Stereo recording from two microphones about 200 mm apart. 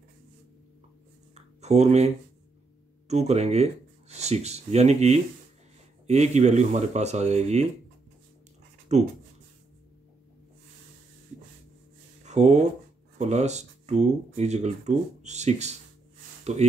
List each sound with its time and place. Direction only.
1.3 s a sound: 35° right (ahead or behind)
3.1 s speech: 35° right (ahead or behind)
8.9 s speech: 35° right (ahead or behind)
12.3 s speech: 35° right (ahead or behind)